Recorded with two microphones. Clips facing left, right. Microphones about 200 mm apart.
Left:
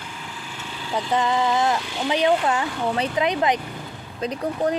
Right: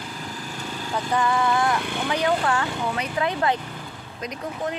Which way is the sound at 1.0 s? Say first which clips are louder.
Left 1 dB; 20° left (ahead or behind).